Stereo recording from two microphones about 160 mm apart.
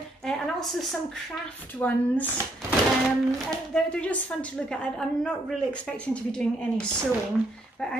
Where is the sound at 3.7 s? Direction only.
5° left (ahead or behind).